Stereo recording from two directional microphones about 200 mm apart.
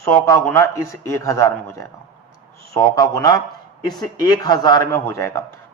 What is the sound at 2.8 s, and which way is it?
A man's voice, 15° left (ahead or behind).